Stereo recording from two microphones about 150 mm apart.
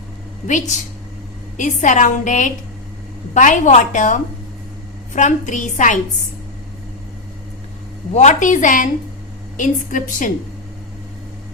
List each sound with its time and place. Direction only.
1.5 s a woman's voice: 55° left (ahead or behind)
8.1 s a woman's voice: 55° left (ahead or behind)